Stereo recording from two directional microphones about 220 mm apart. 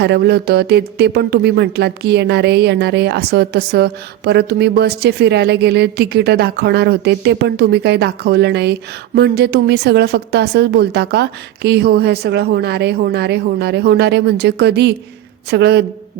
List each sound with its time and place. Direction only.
0.0 s speech: 50° right (ahead or behind)